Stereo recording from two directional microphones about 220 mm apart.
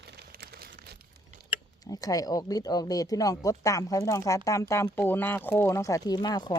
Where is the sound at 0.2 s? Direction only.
45° right (ahead or behind).